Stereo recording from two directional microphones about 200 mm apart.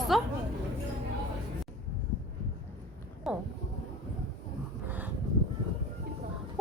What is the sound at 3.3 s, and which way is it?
Speech, centre (ahead or behind).